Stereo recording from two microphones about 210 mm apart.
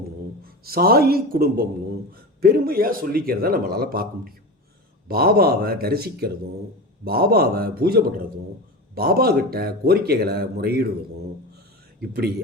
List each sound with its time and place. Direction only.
0.4 s speech: 45° right (ahead or behind)